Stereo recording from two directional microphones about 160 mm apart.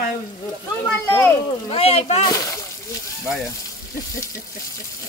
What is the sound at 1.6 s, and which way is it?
Speech, 40° left (ahead or behind).